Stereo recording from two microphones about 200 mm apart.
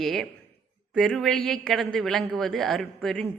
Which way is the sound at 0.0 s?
Centre (ahead or behind).